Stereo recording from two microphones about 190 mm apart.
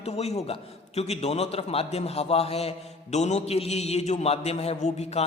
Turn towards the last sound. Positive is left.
turn(degrees=35)  # may be behind; listen again after turning